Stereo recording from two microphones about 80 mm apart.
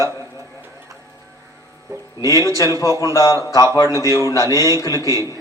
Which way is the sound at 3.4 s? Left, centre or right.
Left.